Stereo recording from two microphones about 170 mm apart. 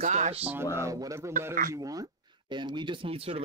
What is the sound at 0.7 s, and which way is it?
Speech, 20° right (ahead or behind).